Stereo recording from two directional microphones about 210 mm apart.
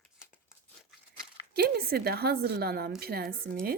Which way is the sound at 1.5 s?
50° right (ahead or behind).